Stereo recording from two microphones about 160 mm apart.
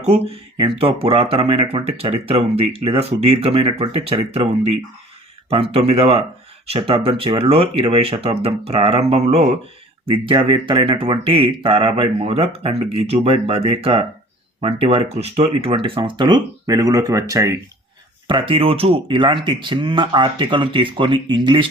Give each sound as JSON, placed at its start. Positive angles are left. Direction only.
{"t": 0.6, "sound": "speech", "side_deg": -35}
{"t": 18.3, "sound": "speech", "side_deg": -30}